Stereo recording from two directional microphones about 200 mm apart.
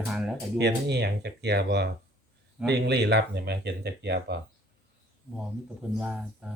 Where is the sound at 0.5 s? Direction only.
55° right (ahead or behind).